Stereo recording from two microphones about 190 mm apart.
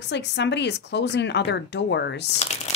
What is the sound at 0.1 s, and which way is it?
Speech, 65° left (ahead or behind).